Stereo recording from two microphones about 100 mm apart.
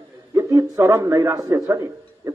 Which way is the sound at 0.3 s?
35° right (ahead or behind).